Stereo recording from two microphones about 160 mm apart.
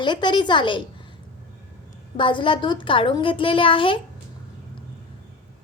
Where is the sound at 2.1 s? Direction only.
30° left (ahead or behind).